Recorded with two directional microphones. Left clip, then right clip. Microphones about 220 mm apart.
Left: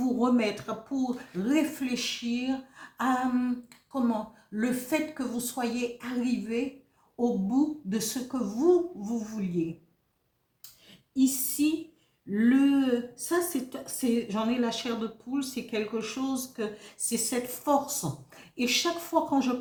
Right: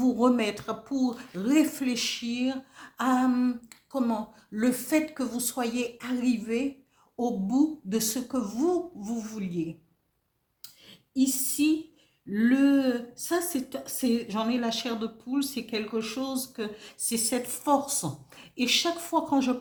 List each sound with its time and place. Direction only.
0.0 s speech: 45° right (ahead or behind)
4.5 s speech: 45° right (ahead or behind)
11.1 s speech: 40° right (ahead or behind)